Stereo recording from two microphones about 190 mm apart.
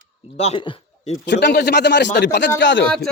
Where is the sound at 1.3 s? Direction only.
65° left (ahead or behind).